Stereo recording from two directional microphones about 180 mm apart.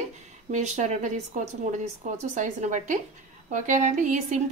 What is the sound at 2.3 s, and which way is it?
A woman's voice, 45° right (ahead or behind).